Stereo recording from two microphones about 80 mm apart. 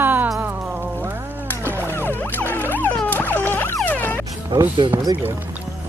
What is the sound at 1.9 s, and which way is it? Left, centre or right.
Music, left.